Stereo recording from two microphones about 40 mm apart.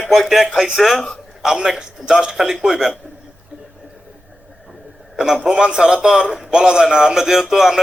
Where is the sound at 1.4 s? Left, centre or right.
Centre.